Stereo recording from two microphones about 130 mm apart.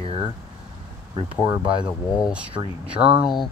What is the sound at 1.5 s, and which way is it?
Speech, 35° right (ahead or behind).